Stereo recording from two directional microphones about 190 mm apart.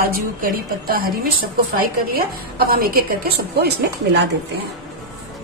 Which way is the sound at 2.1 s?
55° right (ahead or behind).